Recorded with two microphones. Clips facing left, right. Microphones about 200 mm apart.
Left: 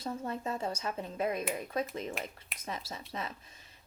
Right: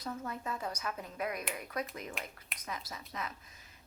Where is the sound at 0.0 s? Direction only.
30° left (ahead or behind).